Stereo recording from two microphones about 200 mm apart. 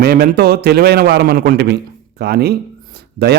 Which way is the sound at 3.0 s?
55° right (ahead or behind).